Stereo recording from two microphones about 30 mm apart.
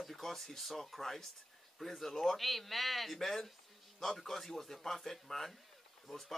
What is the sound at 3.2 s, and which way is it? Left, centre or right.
A man's voice, centre.